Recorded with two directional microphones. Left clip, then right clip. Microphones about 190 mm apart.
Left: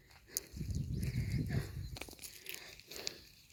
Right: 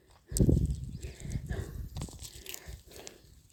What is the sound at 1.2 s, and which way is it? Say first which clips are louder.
Horse: right 3 dB; 30° right (ahead or behind).